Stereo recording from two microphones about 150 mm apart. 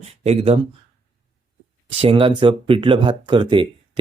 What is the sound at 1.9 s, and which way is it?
Speech, 40° right (ahead or behind).